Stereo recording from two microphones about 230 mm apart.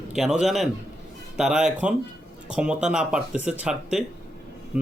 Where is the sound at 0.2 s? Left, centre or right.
Centre.